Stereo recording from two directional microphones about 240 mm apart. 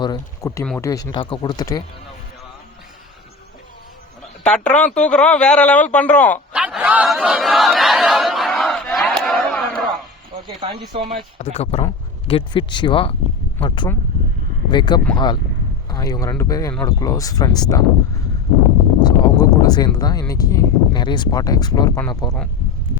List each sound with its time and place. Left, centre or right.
0.0 s speech: centre
4.7 s a man's voice: centre
6.5 s a sound: centre
10.4 s speech: centre
11.3 s speech: left
19.0 s speech: centre